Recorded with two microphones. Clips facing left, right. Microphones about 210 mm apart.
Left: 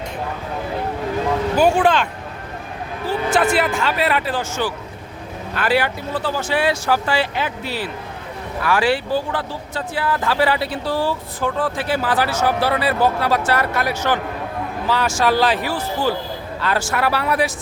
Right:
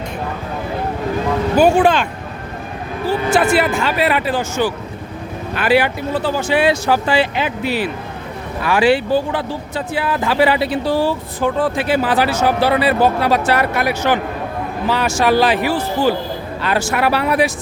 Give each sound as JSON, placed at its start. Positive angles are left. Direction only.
{"t": 1.6, "sound": "speech", "side_deg": -10}
{"t": 3.1, "sound": "speech", "side_deg": -10}
{"t": 16.6, "sound": "speech", "side_deg": -15}